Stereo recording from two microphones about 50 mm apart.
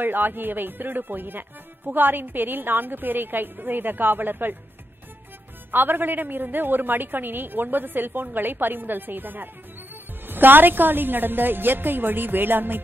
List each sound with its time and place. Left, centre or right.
0.0 s a woman's voice: right
5.7 s a woman's voice: right